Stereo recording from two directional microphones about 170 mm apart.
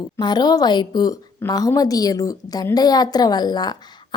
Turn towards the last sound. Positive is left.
turn(degrees=25)  # may be behind; listen again after turning